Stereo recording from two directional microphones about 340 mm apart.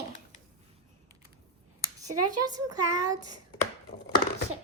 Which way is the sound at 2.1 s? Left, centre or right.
Right.